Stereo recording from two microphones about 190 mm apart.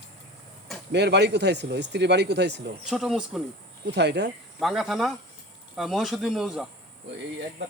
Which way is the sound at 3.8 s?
65° right (ahead or behind).